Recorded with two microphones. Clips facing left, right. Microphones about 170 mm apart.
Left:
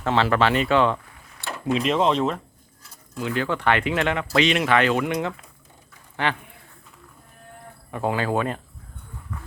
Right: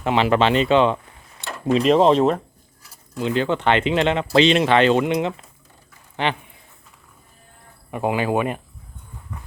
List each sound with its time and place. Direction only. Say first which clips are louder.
0.0 s speech: right 2 dB; 15° right (ahead or behind)
1.6 s speech: right 6 dB; 35° right (ahead or behind)
3.2 s speech: right 4 dB; 25° right (ahead or behind)
7.9 s speech: right 3 dB; 15° right (ahead or behind)
9.3 s train: left 1 dB; 15° right (ahead or behind)